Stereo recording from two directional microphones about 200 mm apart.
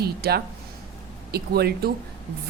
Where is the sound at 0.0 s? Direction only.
50° right (ahead or behind).